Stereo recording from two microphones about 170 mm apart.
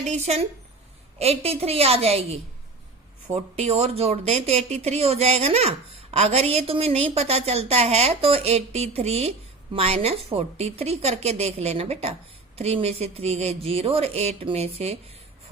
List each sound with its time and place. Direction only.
0.1 s speech: 40° right (ahead or behind)